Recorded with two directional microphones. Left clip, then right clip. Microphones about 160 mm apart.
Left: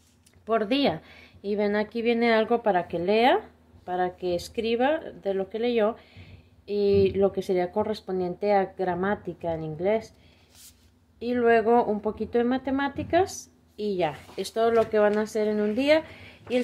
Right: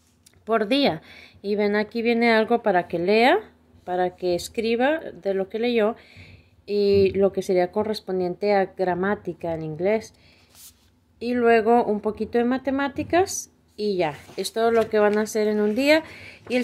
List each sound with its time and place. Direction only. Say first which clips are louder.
0.5 s speech: right 3 dB; 25° right (ahead or behind)
11.1 s speech: right 3 dB; 30° right (ahead or behind)